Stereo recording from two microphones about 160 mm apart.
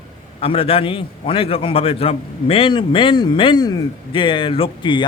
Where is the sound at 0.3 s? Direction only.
35° left (ahead or behind).